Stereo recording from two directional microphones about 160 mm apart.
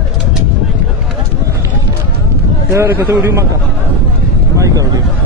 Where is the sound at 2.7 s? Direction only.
15° right (ahead or behind).